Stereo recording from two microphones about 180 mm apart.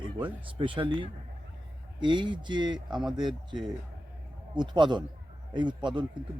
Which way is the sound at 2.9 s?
Centre (ahead or behind).